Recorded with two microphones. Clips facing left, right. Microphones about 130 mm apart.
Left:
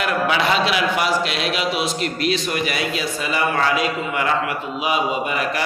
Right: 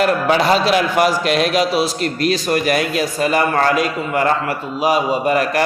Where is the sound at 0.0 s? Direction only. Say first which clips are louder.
Right 5 dB; 40° right (ahead or behind).